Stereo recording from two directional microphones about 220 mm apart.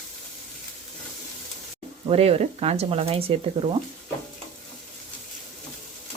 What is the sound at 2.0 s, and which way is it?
Speech, 25° right (ahead or behind).